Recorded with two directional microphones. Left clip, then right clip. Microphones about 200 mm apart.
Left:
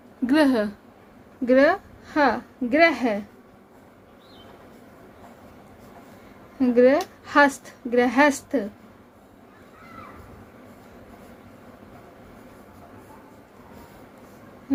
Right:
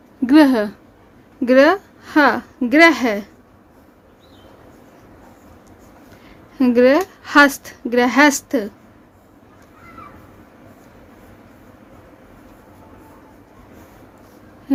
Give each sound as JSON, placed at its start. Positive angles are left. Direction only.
{"t": 0.3, "sound": "a woman's voice", "side_deg": -25}
{"t": 6.6, "sound": "a woman's voice", "side_deg": -35}